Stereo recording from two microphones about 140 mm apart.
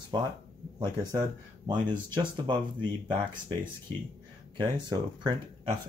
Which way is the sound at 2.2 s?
35° right (ahead or behind).